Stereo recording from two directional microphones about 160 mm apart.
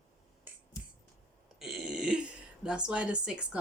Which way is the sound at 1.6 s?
Centre (ahead or behind).